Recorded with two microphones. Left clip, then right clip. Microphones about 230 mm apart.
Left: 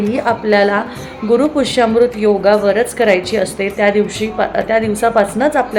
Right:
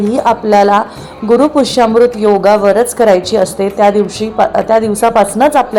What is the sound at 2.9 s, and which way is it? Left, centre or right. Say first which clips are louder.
A woman's voice: right 4 dB; centre.